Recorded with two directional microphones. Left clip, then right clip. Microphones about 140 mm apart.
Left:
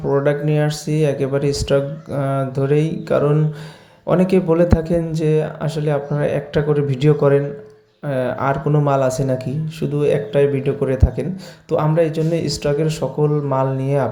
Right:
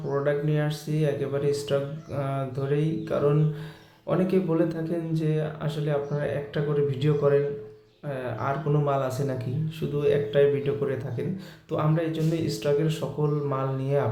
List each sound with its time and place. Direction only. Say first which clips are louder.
0.1 s a man's voice: left 8 dB; 45° left (ahead or behind)